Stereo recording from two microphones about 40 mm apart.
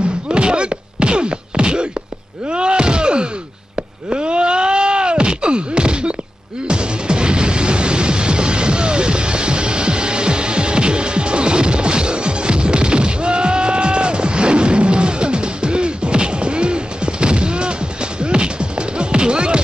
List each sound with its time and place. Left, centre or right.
0.3 s a sound: right
2.5 s slam: right
3.7 s wail: right
6.7 s music: right